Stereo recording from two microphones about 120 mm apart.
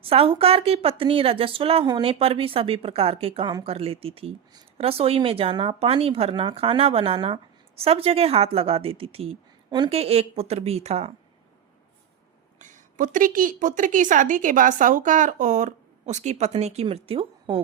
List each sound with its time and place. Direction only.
0.0 s a woman's voice: 50° right (ahead or behind)
12.5 s a woman's voice: 90° right; by 16.8 s 65° right (ahead or behind)
16.9 s speech: 50° right (ahead or behind)